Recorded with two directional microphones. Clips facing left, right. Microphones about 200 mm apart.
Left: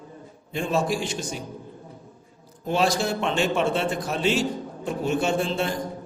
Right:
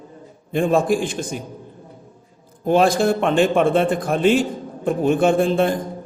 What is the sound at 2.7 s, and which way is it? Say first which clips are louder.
A man's voice: right 7 dB; 55° right (ahead or behind).